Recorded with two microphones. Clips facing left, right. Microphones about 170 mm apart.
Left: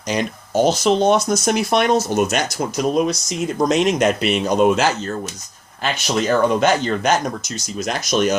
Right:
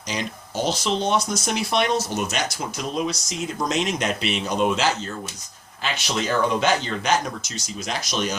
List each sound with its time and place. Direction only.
0.1 s speech: 50° left (ahead or behind)